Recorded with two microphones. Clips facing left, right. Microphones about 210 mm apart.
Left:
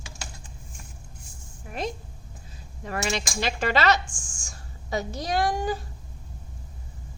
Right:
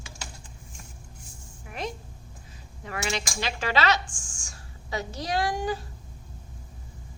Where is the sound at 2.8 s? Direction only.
40° left (ahead or behind).